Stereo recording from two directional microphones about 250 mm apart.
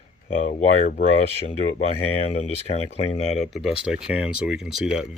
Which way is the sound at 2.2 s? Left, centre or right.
Left.